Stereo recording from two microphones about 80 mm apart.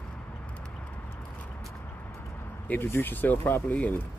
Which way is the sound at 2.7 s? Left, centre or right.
Left.